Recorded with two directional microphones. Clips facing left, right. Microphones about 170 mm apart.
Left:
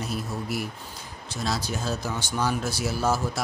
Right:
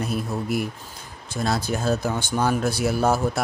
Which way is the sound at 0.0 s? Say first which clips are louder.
Right 5 dB; 55° right (ahead or behind).